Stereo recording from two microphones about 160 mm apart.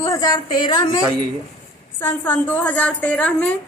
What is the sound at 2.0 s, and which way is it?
A woman's voice, 15° left (ahead or behind).